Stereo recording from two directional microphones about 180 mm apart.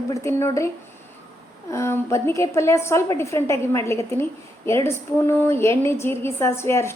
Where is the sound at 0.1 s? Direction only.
15° left (ahead or behind).